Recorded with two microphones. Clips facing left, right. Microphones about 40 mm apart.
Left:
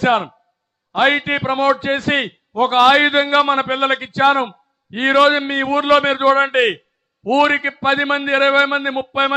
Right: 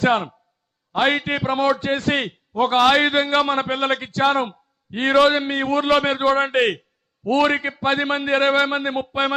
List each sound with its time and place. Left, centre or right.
0.0 s a man's voice: left